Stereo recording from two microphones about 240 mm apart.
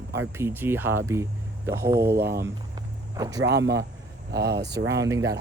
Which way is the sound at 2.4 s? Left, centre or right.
Centre.